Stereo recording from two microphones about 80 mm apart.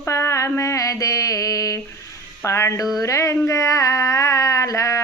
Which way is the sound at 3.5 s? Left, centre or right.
Left.